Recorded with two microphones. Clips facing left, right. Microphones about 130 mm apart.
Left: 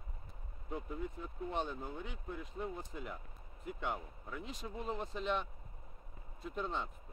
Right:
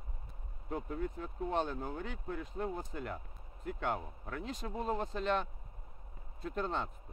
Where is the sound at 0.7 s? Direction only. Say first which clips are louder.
Right 4 dB; 60° right (ahead or behind).